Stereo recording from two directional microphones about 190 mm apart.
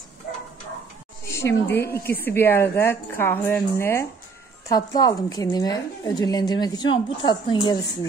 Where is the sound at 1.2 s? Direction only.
15° left (ahead or behind).